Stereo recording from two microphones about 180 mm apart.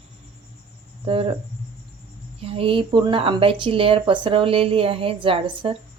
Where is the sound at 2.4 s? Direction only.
30° right (ahead or behind).